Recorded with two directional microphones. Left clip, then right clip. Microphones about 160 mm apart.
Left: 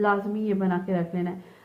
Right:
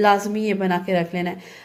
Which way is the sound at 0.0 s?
30° right (ahead or behind).